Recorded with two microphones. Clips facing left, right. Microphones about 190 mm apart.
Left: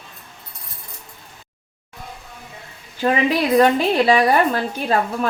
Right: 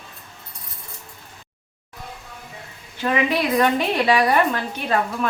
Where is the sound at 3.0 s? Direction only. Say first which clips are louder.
Left 3 dB; 35° left (ahead or behind).